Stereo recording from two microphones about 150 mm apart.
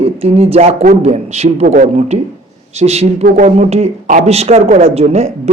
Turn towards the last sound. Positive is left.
turn(degrees=-45)  # may be behind; listen again after turning